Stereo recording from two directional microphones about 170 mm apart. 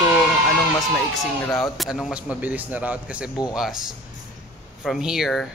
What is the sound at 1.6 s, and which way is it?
A man's voice, centre (ahead or behind).